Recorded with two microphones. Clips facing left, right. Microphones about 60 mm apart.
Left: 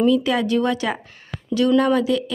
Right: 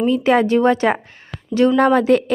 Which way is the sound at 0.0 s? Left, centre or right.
Right.